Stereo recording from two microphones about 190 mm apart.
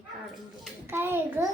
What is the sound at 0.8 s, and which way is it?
Speech, 10° right (ahead or behind).